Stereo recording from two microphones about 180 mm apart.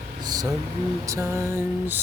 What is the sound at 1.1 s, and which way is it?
Lullaby, 15° right (ahead or behind).